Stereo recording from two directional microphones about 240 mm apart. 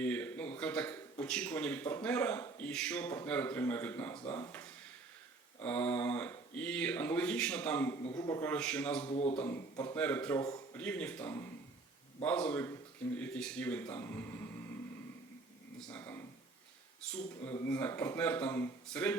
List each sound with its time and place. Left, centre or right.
0.0 s a sound: centre
1.2 s a man's voice: centre
9.0 s speech: left
9.4 s a man's voice: centre
15.9 s a sound: centre
17.0 s a man's voice: centre